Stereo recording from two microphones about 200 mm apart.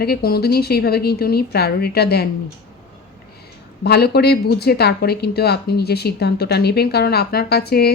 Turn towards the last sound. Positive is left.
turn(degrees=50)  # may be behind; listen again after turning